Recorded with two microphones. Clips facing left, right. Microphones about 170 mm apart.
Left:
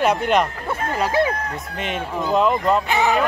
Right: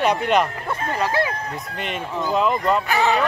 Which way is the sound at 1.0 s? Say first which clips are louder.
Left 3 dB; 15° left (ahead or behind).